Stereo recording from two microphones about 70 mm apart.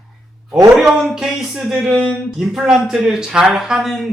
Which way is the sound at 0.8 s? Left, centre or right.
Centre.